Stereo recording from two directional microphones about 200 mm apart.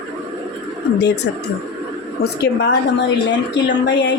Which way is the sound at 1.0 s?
60° left (ahead or behind).